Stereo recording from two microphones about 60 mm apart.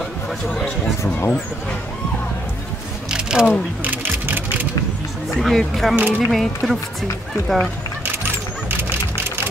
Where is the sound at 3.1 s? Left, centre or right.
Centre.